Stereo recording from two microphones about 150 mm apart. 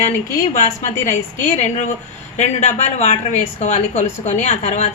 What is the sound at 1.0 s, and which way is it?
A woman's voice, 50° left (ahead or behind).